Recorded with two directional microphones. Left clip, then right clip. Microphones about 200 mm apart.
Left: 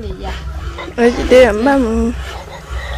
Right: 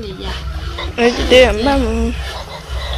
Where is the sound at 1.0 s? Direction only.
20° left (ahead or behind).